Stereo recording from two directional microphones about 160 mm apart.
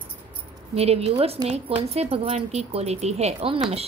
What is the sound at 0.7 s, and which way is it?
Speech, 40° right (ahead or behind).